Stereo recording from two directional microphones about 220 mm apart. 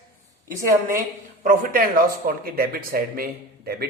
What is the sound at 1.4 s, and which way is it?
A woman's voice, 40° right (ahead or behind).